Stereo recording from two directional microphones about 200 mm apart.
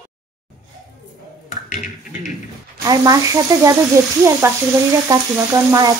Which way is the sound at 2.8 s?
20° right (ahead or behind).